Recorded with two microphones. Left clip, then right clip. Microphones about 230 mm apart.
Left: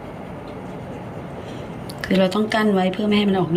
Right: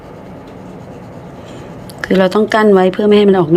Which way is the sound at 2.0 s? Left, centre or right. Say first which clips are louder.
Right 8 dB; centre.